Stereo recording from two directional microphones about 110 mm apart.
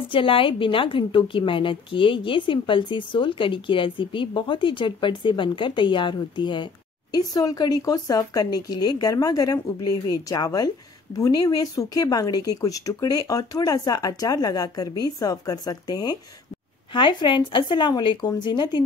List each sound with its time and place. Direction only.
0.1 s a woman's voice: 50° left (ahead or behind)